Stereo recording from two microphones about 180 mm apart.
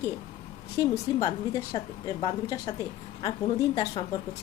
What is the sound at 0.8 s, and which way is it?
A woman's voice, 20° left (ahead or behind).